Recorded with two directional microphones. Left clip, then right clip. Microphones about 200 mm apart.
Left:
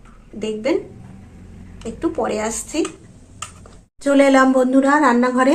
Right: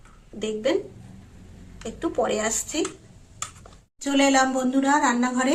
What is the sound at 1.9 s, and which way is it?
Speech, 5° right (ahead or behind).